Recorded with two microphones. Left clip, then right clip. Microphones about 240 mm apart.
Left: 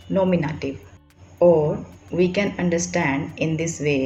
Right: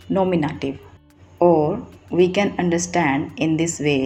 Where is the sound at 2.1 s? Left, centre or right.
Right.